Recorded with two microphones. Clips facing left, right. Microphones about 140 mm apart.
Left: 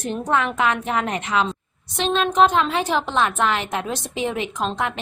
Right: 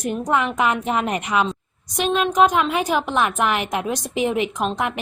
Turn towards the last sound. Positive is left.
turn(degrees=-15)  # may be behind; listen again after turning